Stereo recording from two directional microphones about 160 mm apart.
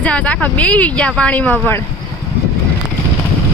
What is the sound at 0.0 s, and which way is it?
Speech, 5° left (ahead or behind).